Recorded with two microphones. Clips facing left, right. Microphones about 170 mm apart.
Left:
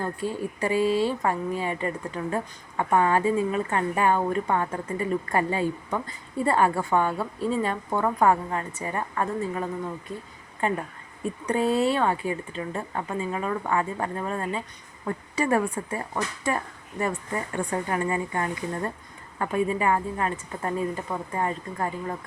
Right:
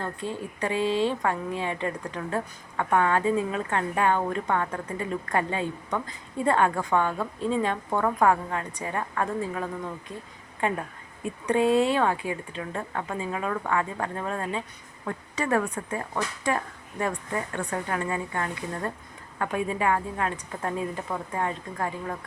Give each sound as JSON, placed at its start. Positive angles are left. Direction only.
{"t": 0.0, "sound": "speech", "side_deg": 10}